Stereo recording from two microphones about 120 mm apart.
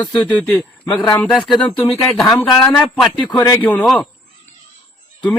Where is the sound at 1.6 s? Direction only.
45° left (ahead or behind).